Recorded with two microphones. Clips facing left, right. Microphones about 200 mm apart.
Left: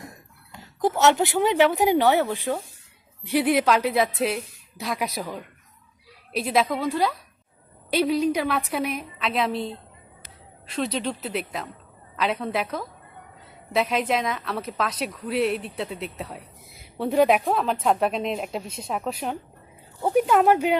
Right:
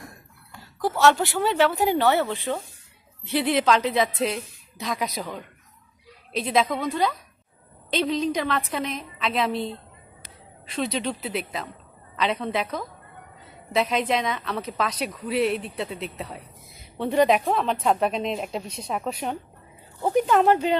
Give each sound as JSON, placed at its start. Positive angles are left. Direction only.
{"t": 0.5, "sound": "a woman's voice", "side_deg": 20}